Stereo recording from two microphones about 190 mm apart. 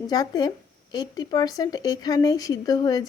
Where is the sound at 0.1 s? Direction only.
20° left (ahead or behind).